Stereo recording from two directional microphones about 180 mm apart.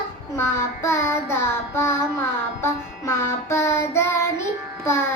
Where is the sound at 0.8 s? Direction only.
15° left (ahead or behind).